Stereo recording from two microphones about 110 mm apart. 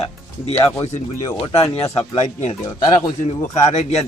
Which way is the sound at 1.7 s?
80° left.